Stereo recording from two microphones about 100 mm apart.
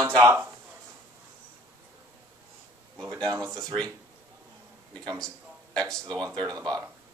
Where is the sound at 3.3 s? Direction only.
30° right (ahead or behind).